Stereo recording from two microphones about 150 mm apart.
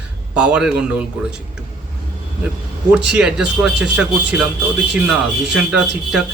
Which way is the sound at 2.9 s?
5° right (ahead or behind).